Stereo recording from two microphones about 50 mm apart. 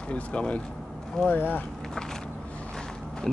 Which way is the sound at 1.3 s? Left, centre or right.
Left.